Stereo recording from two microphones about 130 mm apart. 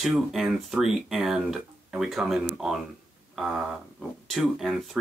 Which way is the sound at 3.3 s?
Centre (ahead or behind).